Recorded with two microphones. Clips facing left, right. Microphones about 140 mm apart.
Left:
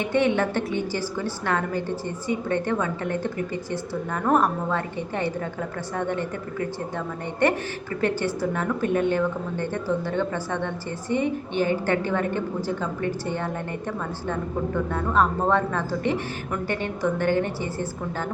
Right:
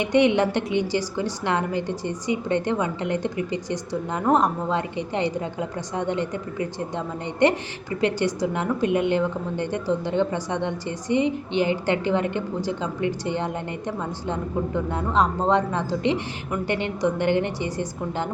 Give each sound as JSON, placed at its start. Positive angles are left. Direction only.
{"t": 0.0, "sound": "a woman's voice", "side_deg": -15}